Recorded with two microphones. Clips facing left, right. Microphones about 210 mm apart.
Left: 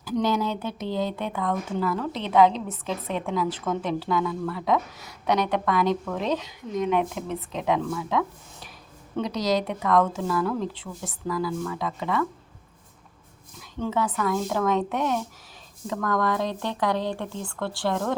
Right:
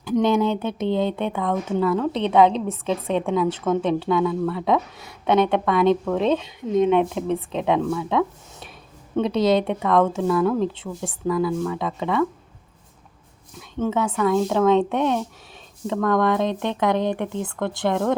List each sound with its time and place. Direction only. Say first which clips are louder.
0.0 s speech: right 5 dB; 25° right (ahead or behind)
13.6 s speech: right 4 dB; 20° right (ahead or behind)